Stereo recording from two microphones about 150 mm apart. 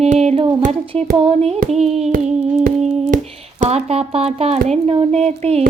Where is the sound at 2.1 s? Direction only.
70° right (ahead or behind).